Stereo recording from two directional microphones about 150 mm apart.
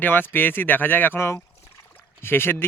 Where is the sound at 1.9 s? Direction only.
15° left (ahead or behind).